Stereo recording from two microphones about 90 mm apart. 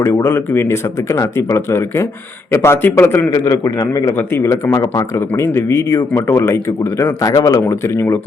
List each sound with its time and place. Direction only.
0.0 s a man's voice: 30° left (ahead or behind)
3.3 s a man's voice: 45° left (ahead or behind)
4.7 s speech: 40° left (ahead or behind)
7.7 s a man's voice: 30° left (ahead or behind)